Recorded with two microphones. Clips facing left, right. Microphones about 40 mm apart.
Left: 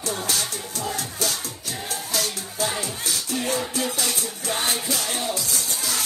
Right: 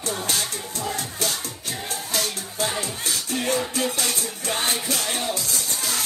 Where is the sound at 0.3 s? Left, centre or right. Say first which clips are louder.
Even; right.